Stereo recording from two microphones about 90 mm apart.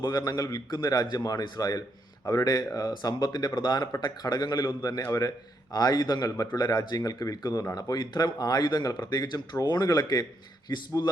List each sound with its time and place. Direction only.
0.0 s a man's voice: 50° left (ahead or behind)